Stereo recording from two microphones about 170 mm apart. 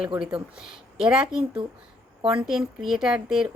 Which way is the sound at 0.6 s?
5° right (ahead or behind).